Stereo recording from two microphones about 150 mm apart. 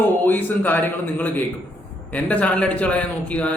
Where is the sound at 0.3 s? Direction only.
10° left (ahead or behind).